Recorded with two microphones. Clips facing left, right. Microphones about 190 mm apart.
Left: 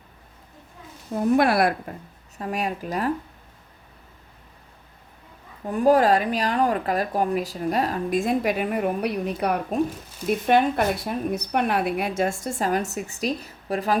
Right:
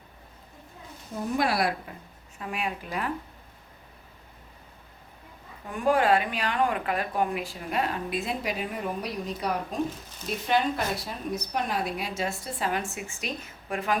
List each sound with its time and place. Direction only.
1.4 s speech: 55° left (ahead or behind)
2.4 s speech: 40° left (ahead or behind)
5.6 s a woman's voice: 40° left (ahead or behind)